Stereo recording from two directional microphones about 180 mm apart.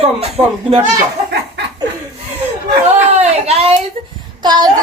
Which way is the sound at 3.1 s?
35° right (ahead or behind).